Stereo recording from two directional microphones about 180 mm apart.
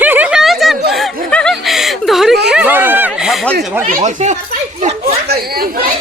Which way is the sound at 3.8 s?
45° right (ahead or behind).